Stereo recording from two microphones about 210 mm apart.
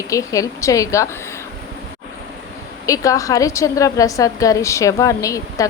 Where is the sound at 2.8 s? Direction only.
15° left (ahead or behind).